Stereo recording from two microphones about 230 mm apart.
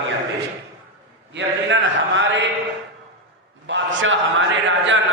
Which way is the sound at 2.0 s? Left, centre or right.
Right.